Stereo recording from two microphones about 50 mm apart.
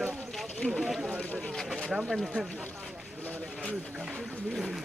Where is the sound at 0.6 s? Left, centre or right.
Centre.